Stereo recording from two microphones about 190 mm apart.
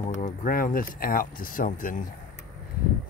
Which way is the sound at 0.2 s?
45° left (ahead or behind).